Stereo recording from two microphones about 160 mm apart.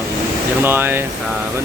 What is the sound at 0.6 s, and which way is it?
Speech, 15° right (ahead or behind).